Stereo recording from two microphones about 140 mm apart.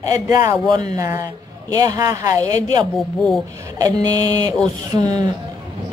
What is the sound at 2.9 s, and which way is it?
Speech, centre (ahead or behind).